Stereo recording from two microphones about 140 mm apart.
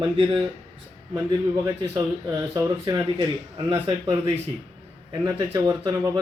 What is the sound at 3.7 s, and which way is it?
Speech, 35° right (ahead or behind).